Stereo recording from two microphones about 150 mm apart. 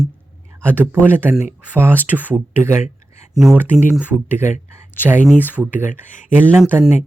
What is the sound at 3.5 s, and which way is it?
Speech, 15° right (ahead or behind).